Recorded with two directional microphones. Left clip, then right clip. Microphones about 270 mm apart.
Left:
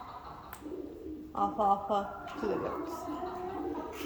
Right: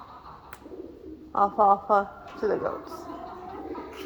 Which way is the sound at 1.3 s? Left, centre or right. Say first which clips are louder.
Right 8 dB; right.